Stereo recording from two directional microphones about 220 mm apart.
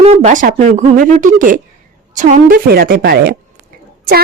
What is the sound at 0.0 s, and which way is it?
A woman's voice, 30° right (ahead or behind).